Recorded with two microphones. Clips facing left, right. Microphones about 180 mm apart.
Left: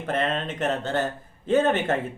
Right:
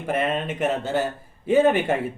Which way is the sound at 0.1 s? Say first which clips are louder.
Right 2 dB; 10° right (ahead or behind).